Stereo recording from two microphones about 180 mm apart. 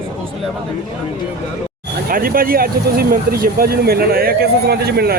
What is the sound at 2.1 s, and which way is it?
Speech, 55° right (ahead or behind).